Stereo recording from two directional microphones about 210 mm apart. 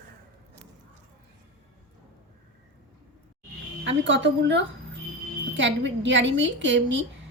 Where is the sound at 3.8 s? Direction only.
60° right (ahead or behind).